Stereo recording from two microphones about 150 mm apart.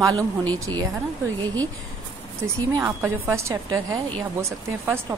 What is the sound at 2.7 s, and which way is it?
A woman's voice, 15° right (ahead or behind).